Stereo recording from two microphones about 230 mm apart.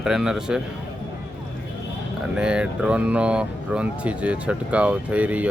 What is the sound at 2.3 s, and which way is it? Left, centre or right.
Speech, centre.